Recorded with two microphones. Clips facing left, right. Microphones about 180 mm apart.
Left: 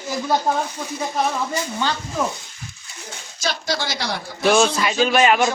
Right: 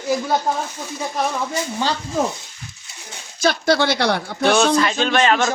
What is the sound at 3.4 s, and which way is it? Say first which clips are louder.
Speech: right 8 dB; 55° right (ahead or behind).